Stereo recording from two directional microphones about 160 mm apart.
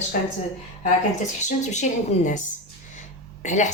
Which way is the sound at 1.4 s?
45° left (ahead or behind).